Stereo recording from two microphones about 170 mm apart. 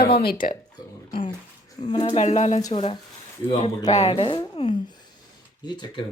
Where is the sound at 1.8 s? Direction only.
25° left (ahead or behind).